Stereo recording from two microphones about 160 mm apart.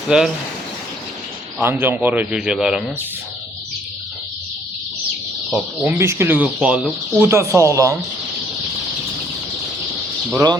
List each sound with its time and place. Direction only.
0.1 s speech: 5° right (ahead or behind)
1.6 s speech: 15° right (ahead or behind)
5.5 s speech: 15° right (ahead or behind)
7.3 s speech: 15° right (ahead or behind)
10.3 s speech: 25° right (ahead or behind)